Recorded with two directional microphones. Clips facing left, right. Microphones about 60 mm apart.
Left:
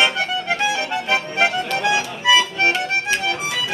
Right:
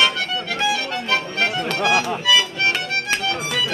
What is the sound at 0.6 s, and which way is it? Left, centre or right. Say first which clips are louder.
Music: left 1 dB; left.